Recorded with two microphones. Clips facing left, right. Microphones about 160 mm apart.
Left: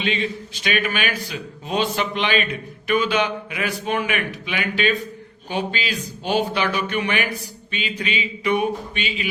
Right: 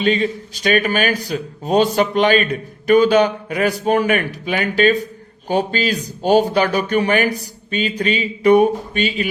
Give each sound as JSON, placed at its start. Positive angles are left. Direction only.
{"t": 0.0, "sound": "a man's voice", "side_deg": -40}